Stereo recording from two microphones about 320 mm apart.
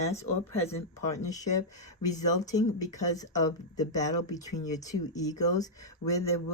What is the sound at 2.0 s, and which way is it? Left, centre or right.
Speech, centre.